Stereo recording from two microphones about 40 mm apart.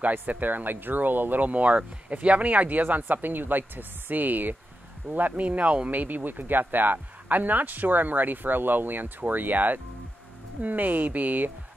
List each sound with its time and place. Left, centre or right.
0.1 s speech: right
5.4 s speech: right
5.9 s speech: right